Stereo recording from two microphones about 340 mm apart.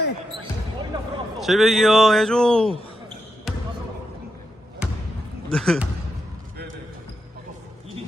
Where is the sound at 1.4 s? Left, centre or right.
Centre.